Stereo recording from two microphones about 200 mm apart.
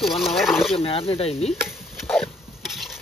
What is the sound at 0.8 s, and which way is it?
Speech, 25° left (ahead or behind).